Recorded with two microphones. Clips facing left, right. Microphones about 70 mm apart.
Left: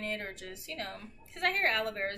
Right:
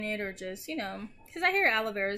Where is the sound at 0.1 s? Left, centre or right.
Right.